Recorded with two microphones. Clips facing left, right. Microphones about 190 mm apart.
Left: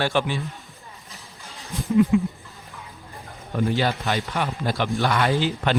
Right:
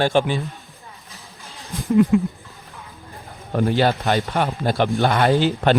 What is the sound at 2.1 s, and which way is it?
Speech, 55° right (ahead or behind).